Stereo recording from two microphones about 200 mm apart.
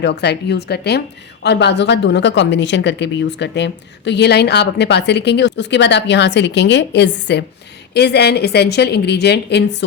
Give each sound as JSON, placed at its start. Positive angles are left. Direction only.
{"t": 0.0, "sound": "a woman's voice", "side_deg": 55}